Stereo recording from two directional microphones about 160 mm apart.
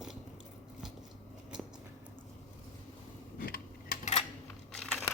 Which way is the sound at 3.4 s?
65° left (ahead or behind).